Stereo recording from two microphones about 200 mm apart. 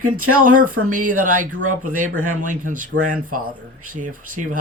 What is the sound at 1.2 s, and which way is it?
Speech, 40° right (ahead or behind).